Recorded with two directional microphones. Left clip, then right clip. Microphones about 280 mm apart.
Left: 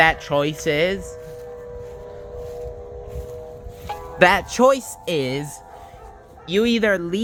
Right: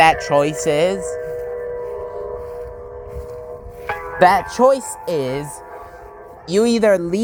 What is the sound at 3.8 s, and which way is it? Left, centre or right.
Music, right.